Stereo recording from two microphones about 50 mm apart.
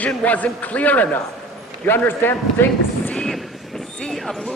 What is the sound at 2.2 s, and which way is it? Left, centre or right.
Speech, left.